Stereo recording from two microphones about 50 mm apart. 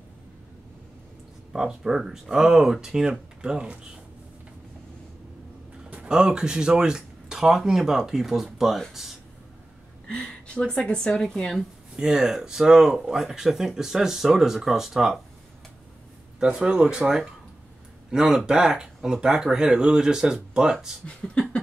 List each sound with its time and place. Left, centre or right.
1.5 s speech: centre
5.9 s a sound: right
6.1 s speech: centre
10.0 s a sound: centre
10.8 s speech: left
11.2 s speech: centre
12.0 s speech: centre
16.3 s speech: centre
18.1 s speech: centre
21.0 s speech: left